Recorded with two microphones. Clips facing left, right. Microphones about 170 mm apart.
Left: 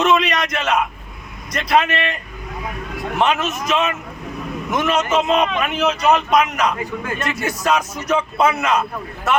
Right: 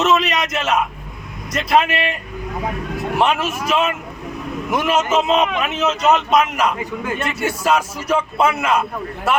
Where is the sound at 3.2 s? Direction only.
10° right (ahead or behind).